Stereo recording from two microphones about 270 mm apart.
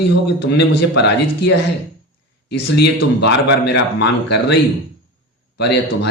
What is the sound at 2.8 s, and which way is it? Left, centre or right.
A man's voice, left.